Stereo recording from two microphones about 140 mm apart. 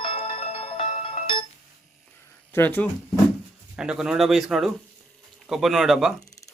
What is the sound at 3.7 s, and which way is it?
Speech, 5° right (ahead or behind).